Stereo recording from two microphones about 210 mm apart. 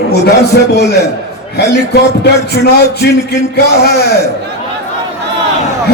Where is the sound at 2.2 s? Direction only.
50° left (ahead or behind).